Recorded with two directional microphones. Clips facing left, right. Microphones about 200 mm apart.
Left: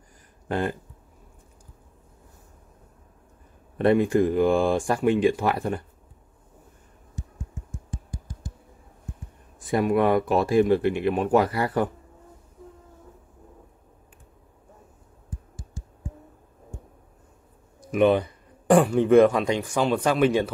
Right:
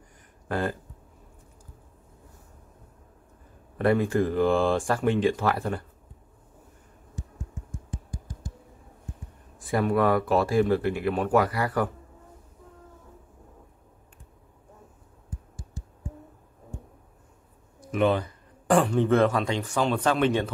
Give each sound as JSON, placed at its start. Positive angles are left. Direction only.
{"t": 0.5, "sound": "speech", "side_deg": 20}
{"t": 3.7, "sound": "speech", "side_deg": 20}
{"t": 9.6, "sound": "speech", "side_deg": 20}
{"t": 17.7, "sound": "a sound", "side_deg": 15}
{"t": 18.7, "sound": "speech", "side_deg": 10}